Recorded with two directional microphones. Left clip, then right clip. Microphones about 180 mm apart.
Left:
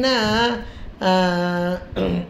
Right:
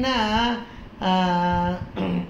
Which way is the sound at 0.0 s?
60° left (ahead or behind).